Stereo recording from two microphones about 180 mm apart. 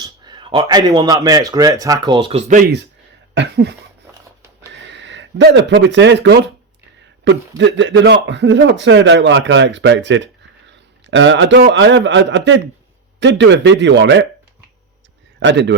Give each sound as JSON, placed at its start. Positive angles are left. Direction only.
{"t": 0.0, "sound": "speech", "side_deg": -25}
{"t": 2.6, "sound": "speech", "side_deg": -60}
{"t": 3.3, "sound": "a sound", "side_deg": -70}
{"t": 4.7, "sound": "a man's voice", "side_deg": -90}
{"t": 15.4, "sound": "a man's voice", "side_deg": -80}